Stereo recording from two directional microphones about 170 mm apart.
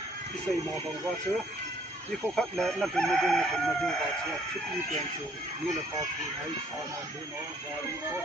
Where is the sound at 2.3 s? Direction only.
5° left (ahead or behind).